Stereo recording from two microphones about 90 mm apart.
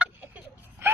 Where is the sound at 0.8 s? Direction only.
25° right (ahead or behind).